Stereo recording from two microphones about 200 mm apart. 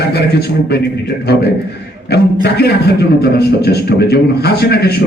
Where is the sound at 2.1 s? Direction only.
55° left (ahead or behind).